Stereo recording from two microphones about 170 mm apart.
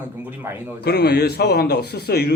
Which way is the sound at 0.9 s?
75° left (ahead or behind).